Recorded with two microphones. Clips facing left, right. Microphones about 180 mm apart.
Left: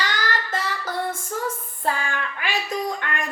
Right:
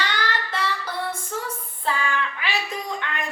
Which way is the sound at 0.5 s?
45° left (ahead or behind).